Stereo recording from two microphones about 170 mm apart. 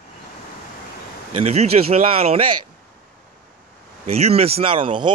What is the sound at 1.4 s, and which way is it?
Speech, 35° right (ahead or behind).